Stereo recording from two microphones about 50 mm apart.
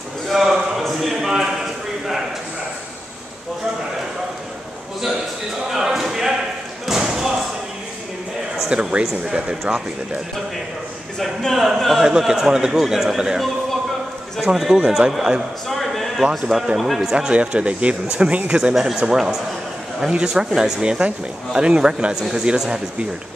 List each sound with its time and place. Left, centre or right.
0.3 s a sound: centre
5.7 s a sound: centre
6.9 s slam: centre
8.6 s speech: right
9.0 s speech: centre
9.7 s speech: right
11.1 s speech: centre
11.8 s a man's voice: centre
14.5 s a man's voice: centre
15.7 s a sound: centre
16.3 s a man's voice: centre
17.0 s speech: centre
19.1 s speech: centre